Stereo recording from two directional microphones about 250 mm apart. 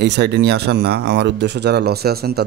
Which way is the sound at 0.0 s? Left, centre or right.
Right.